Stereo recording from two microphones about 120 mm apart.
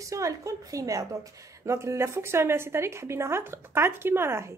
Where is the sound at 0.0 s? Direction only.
25° right (ahead or behind).